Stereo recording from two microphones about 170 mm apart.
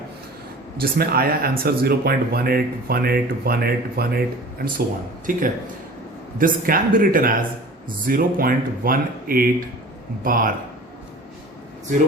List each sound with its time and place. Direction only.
0.8 s speech: 65° right (ahead or behind)
5.3 s a man's voice: 55° right (ahead or behind)